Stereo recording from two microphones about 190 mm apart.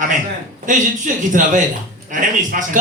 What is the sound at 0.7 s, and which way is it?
Speech, 45° right (ahead or behind).